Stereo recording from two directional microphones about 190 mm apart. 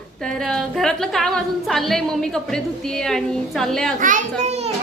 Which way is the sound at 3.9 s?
45° right (ahead or behind).